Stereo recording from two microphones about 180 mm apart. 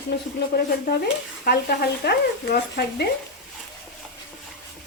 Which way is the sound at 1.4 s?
60° left (ahead or behind).